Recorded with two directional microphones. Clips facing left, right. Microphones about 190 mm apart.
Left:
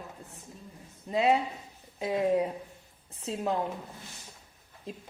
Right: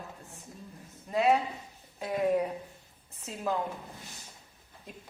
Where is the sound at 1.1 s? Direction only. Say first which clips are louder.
Even; 25° left (ahead or behind).